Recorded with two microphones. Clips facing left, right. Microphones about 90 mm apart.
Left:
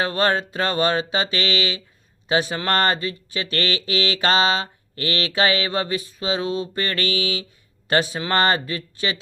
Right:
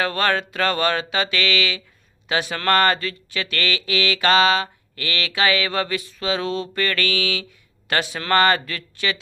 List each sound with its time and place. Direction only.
0.0 s speech: 25° left (ahead or behind)